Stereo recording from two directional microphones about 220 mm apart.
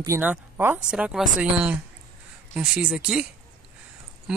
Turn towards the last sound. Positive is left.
turn(degrees=-5)  # may be behind; listen again after turning